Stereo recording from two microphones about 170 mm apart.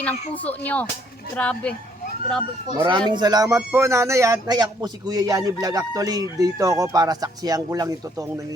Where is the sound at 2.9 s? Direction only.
25° right (ahead or behind).